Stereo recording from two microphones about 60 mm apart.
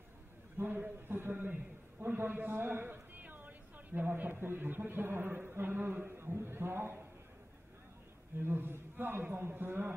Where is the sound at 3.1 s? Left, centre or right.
Right.